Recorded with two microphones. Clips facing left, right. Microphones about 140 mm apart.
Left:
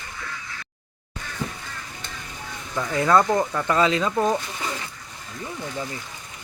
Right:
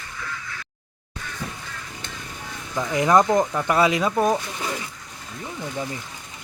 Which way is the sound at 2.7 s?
15° right (ahead or behind).